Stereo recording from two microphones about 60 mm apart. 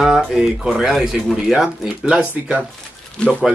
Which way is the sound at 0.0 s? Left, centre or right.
Centre.